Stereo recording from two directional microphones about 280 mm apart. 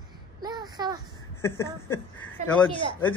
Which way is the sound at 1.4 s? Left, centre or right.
Centre.